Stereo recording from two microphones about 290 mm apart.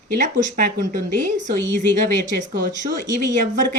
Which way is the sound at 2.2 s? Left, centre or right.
Right.